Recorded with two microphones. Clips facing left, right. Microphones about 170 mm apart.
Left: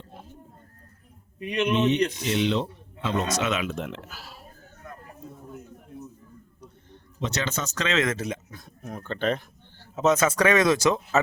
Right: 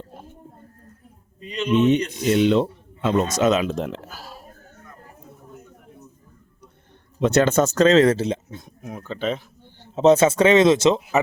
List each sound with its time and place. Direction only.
1.4 s speech: 70° left (ahead or behind)
2.2 s speech: 50° right (ahead or behind)
7.2 s speech: 55° right (ahead or behind); by 8.7 s 25° right (ahead or behind)
8.8 s speech: 10° right (ahead or behind)
9.8 s speech: 30° right (ahead or behind)